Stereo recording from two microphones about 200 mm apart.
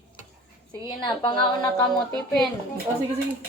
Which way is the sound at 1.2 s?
20° left (ahead or behind).